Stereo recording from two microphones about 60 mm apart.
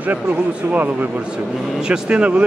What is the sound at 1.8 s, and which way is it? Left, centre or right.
Speech, centre.